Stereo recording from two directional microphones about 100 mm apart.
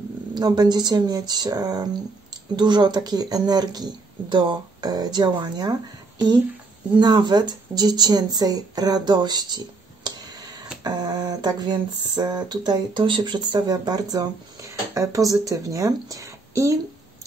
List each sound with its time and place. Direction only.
0.3 s speech: 45° right (ahead or behind)